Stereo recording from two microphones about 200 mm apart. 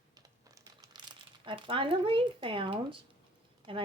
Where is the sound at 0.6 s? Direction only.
20° right (ahead or behind).